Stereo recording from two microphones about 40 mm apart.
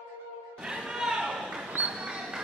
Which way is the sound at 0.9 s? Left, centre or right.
Centre.